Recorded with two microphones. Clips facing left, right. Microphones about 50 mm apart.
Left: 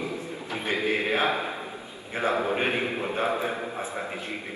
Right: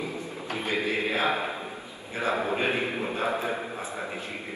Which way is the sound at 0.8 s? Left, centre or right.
Left.